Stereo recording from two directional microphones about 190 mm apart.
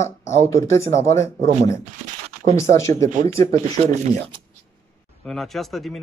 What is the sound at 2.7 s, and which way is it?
Speech, 15° left (ahead or behind).